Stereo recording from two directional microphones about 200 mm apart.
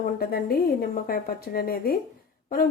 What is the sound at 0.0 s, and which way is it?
A woman's voice, 50° left (ahead or behind).